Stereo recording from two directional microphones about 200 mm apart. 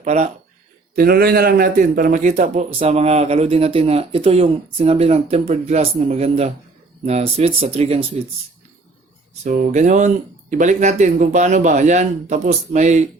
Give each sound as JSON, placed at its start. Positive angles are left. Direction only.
{"t": 0.0, "sound": "speech", "side_deg": -35}
{"t": 0.9, "sound": "a man's voice", "side_deg": -50}
{"t": 9.4, "sound": "a man's voice", "side_deg": -35}